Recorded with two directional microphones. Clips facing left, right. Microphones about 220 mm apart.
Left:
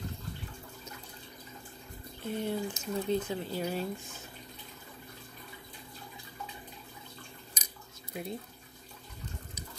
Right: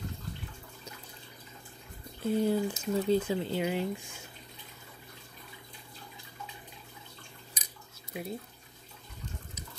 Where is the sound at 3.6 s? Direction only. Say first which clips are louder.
Right 3 dB; 15° right (ahead or behind).